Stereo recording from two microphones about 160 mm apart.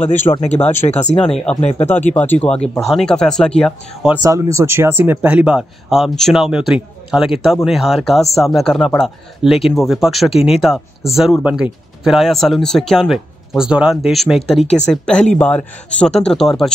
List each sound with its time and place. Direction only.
0.1 s speech: 45° left (ahead or behind)
0.6 s speech: 15° left (ahead or behind)
1.6 s speech: 45° left (ahead or behind)
1.9 s speech: 10° left (ahead or behind)
4.2 s speech: 20° right (ahead or behind); by 14.6 s centre (ahead or behind)
14.6 s speech: 40° left (ahead or behind)
14.9 s speech: 5° left (ahead or behind)